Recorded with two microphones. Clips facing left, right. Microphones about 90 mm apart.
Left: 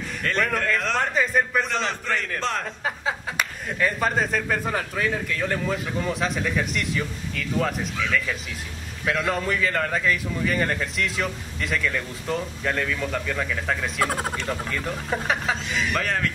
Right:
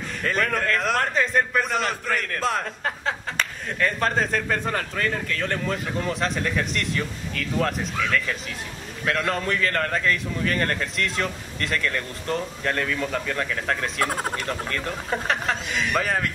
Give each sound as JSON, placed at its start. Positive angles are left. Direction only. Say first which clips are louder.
{"t": 0.2, "sound": "a man's voice", "louder": "even", "side_deg": 0}